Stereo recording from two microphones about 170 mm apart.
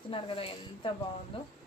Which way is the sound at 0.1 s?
30° left (ahead or behind).